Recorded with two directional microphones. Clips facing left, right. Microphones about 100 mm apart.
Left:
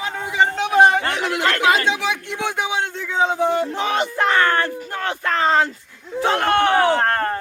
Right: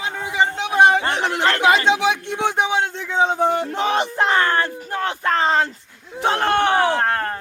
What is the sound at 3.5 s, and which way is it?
Speech, 30° right (ahead or behind).